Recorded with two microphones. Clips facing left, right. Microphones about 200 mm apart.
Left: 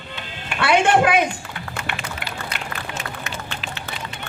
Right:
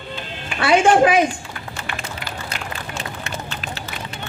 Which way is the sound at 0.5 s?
65° left (ahead or behind).